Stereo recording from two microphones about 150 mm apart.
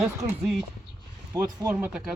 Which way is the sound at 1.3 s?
25° right (ahead or behind).